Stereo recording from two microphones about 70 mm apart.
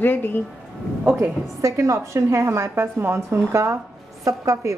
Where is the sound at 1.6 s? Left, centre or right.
Right.